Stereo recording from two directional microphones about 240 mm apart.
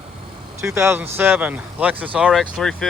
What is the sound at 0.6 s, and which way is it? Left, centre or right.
Speech, centre.